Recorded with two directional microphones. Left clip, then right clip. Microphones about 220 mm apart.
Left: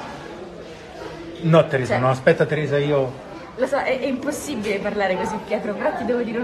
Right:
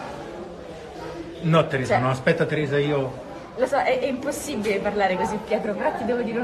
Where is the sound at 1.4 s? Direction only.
Centre (ahead or behind).